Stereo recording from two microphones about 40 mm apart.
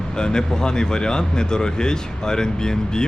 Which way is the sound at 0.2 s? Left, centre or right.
Centre.